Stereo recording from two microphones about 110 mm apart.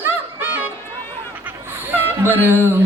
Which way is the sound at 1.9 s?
20° right (ahead or behind).